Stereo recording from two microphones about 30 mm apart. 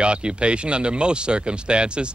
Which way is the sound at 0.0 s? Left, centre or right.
Right.